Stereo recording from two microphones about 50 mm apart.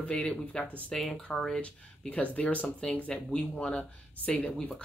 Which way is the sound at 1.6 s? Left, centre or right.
Left.